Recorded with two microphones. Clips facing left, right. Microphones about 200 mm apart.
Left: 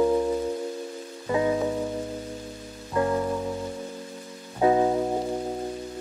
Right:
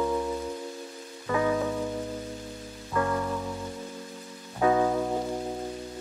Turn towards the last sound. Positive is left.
turn(degrees=25)  # may be behind; listen again after turning